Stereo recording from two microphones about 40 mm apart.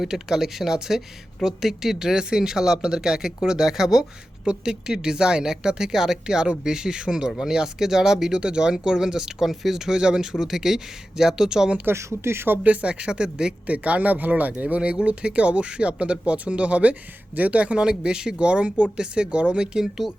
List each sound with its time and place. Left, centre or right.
0.0 s speech: centre
11.9 s speech: right
12.6 s speech: right
13.7 s speech: right
17.8 s speech: right